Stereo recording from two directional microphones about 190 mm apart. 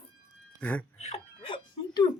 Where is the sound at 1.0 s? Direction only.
30° left (ahead or behind).